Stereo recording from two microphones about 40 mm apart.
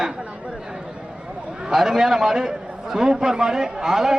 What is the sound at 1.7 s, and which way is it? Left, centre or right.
A man's voice, centre.